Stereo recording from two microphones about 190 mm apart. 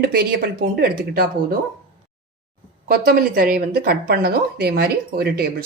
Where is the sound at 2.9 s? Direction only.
50° right (ahead or behind).